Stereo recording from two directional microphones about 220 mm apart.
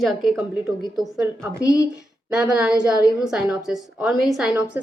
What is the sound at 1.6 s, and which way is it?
Speech, 15° left (ahead or behind).